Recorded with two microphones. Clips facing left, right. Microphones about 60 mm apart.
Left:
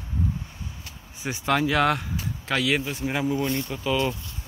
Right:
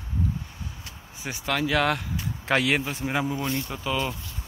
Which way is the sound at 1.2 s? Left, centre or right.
Centre.